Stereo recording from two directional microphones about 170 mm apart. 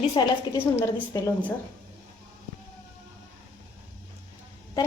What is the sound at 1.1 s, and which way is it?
Speech, 15° left (ahead or behind).